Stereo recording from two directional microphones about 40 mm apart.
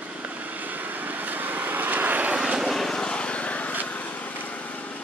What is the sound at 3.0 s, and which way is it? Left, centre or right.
Vehicle, left.